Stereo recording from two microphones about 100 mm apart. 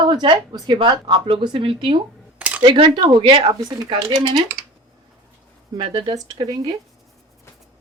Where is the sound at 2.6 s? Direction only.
60° right (ahead or behind).